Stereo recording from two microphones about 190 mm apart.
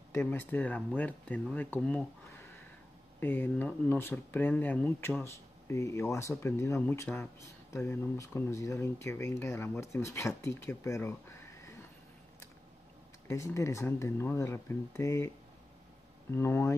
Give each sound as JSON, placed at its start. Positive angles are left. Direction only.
{"t": 0.1, "sound": "speech", "side_deg": 10}
{"t": 13.3, "sound": "speech", "side_deg": 15}